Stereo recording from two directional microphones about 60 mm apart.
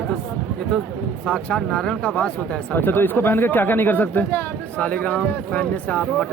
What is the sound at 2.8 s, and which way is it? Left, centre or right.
Speech, left.